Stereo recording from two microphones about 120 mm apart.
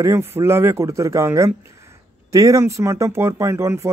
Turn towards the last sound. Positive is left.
turn(degrees=-25)  # may be behind; listen again after turning